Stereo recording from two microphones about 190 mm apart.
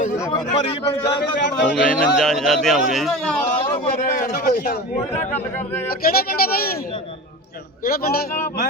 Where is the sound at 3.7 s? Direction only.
40° left (ahead or behind).